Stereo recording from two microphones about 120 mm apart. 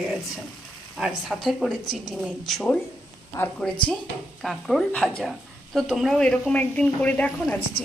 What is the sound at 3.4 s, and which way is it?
Speech, 20° left (ahead or behind).